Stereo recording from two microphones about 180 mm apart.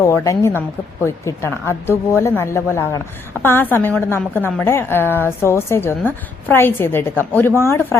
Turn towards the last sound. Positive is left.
turn(degrees=15)  # may be behind; listen again after turning